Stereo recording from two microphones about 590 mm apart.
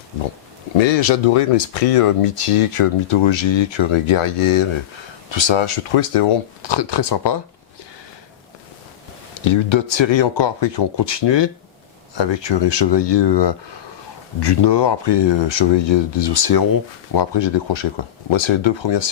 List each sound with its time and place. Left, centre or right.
0.8 s speech: left
6.6 s speech: left
9.4 s speech: left